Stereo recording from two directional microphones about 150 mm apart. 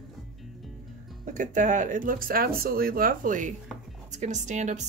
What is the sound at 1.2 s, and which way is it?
Speech, 60° right (ahead or behind).